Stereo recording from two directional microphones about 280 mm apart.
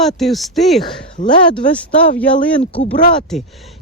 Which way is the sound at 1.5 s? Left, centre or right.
Centre.